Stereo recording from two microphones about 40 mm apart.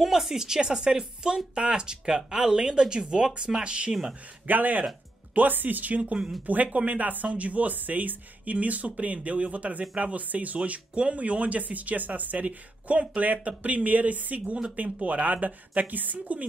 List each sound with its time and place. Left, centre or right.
0.0 s a woman's voice: centre; by 3.9 s right
4.5 s speech: right